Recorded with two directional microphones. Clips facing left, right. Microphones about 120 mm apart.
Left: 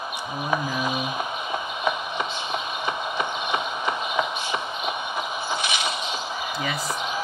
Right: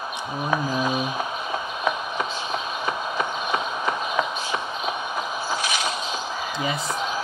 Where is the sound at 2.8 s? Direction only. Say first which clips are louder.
Right 1 dB; 40° right (ahead or behind).